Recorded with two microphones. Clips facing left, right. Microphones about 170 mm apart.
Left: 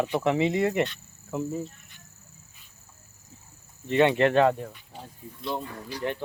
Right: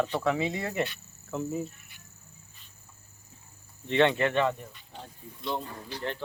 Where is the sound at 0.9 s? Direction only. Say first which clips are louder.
Left 2 dB; centre (ahead or behind).